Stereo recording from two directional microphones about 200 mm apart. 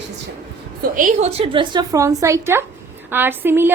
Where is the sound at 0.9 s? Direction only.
40° right (ahead or behind).